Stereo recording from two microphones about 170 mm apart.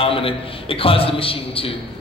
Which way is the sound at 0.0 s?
30° left (ahead or behind).